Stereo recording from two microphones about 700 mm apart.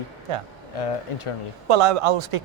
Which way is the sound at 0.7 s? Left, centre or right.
Left.